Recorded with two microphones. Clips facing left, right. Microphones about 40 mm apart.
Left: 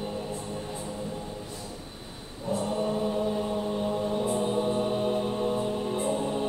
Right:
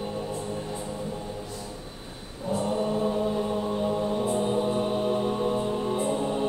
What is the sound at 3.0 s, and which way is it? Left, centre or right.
Chant, centre.